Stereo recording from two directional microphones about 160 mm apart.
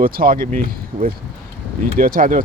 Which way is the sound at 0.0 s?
65° right (ahead or behind).